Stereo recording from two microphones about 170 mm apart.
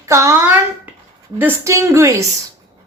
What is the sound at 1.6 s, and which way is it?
Speech, 15° right (ahead or behind).